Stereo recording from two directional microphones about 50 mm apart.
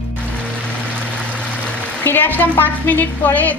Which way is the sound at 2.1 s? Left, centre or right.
Left.